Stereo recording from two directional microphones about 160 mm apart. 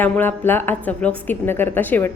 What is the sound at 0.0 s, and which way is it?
A woman's voice, 10° left (ahead or behind).